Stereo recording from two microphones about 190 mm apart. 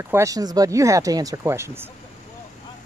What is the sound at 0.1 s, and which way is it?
Speech, 15° right (ahead or behind).